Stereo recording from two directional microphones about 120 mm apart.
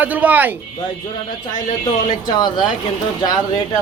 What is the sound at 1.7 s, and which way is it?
Speech, 35° left (ahead or behind).